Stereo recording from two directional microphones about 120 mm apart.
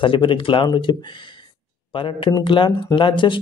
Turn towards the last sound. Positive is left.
turn(degrees=40)  # may be behind; listen again after turning